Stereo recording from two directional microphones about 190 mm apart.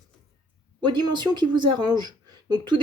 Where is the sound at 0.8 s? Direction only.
25° right (ahead or behind).